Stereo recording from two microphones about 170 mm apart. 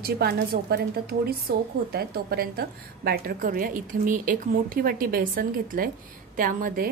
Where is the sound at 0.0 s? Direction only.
70° right (ahead or behind).